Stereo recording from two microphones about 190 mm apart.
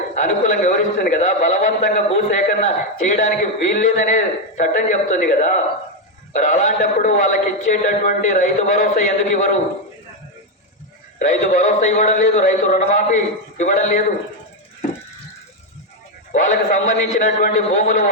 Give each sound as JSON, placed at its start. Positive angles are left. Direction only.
{"t": 0.2, "sound": "a man's voice", "side_deg": 40}
{"t": 11.2, "sound": "a man's voice", "side_deg": 40}
{"t": 16.3, "sound": "a man's voice", "side_deg": 40}